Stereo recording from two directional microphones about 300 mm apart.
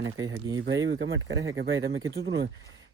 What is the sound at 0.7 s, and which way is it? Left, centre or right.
Speech, right.